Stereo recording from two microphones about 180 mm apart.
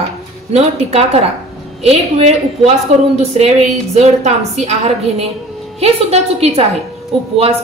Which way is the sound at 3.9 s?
40° right (ahead or behind).